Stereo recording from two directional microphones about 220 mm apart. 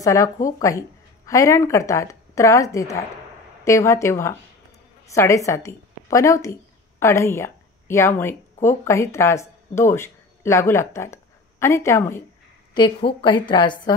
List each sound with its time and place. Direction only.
0.0 s a woman's voice: 15° left (ahead or behind)
13.2 s a woman's voice: 20° left (ahead or behind)